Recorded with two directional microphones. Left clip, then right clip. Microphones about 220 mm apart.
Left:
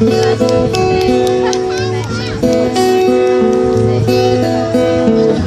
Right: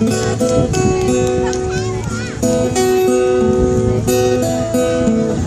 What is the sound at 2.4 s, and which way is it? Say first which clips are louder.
Music: left 3 dB; 45° right (ahead or behind).